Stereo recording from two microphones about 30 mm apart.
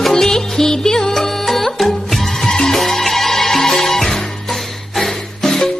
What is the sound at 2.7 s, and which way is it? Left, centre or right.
Music, centre.